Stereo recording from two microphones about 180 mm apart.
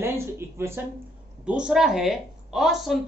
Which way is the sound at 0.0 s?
15° right (ahead or behind).